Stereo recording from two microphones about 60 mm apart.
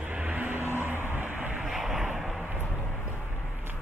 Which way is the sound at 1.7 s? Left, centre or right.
Centre.